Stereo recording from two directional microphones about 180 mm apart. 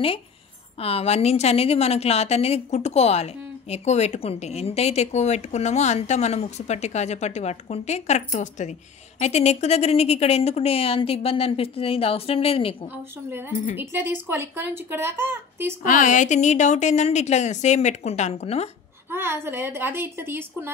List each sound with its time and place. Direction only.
0.7 s a woman's voice: 35° left (ahead or behind)
12.8 s speech: 15° right (ahead or behind)
15.8 s a woman's voice: 45° left (ahead or behind)
19.0 s speech: 10° right (ahead or behind)